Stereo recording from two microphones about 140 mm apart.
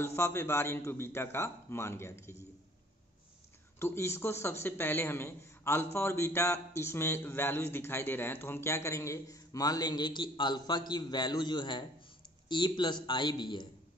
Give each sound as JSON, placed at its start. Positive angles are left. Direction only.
{"t": 0.0, "sound": "a man's voice", "side_deg": 15}
{"t": 3.8, "sound": "a man's voice", "side_deg": 20}